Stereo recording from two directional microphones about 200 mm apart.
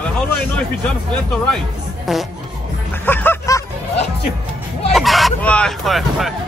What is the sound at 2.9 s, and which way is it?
Snicker, 10° left (ahead or behind).